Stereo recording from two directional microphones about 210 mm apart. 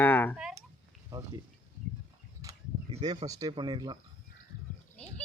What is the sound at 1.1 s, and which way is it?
Speech, 20° right (ahead or behind).